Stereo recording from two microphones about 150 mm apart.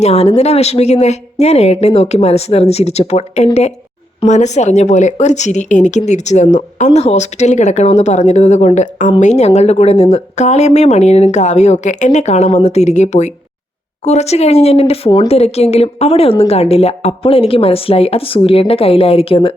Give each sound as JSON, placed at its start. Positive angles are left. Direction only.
{"t": 0.0, "sound": "a woman's voice", "side_deg": 45}